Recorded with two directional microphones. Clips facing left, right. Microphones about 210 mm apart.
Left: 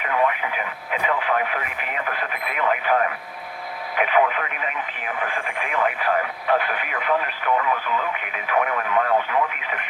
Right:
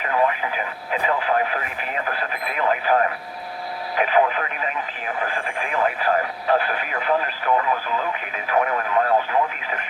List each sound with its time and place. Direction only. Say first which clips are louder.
0.0 s radio: right 1 dB; 35° right (ahead or behind)